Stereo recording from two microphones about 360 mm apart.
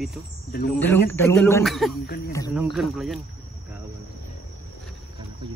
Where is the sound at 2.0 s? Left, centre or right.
Left.